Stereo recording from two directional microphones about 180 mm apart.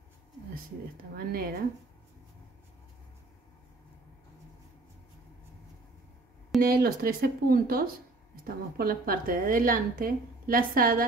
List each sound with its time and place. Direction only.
1.1 s speech: 55° right (ahead or behind)
6.6 s a woman's voice: 55° right (ahead or behind)